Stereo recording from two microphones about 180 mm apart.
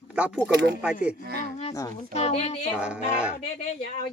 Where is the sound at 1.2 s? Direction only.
60° right (ahead or behind).